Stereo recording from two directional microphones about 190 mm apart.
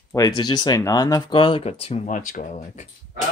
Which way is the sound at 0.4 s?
25° left (ahead or behind).